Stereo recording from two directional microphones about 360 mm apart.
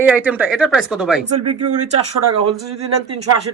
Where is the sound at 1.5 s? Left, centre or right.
Right.